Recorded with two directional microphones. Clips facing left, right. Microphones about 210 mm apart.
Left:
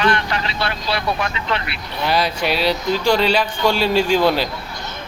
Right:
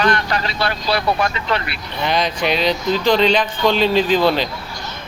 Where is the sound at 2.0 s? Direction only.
5° left (ahead or behind).